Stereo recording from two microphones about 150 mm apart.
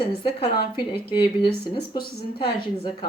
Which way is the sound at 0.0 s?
35° left (ahead or behind).